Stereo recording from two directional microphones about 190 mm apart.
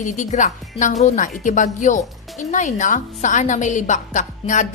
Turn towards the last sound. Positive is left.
turn(degrees=40)  # may be behind; listen again after turning